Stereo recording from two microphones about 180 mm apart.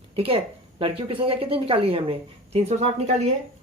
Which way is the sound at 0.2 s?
30° right (ahead or behind).